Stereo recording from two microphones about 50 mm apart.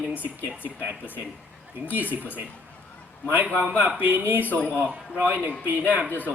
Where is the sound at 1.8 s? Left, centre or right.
Right.